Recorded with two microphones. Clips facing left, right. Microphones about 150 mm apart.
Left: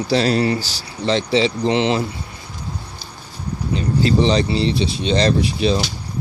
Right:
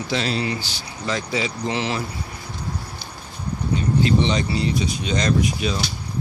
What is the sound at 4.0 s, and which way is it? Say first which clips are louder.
Speech: left 6 dB; 35° left (ahead or behind).